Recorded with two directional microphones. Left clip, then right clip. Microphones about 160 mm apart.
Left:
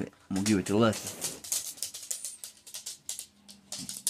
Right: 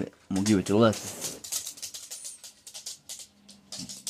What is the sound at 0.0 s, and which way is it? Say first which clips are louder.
Speech: right 3 dB; 20° right (ahead or behind).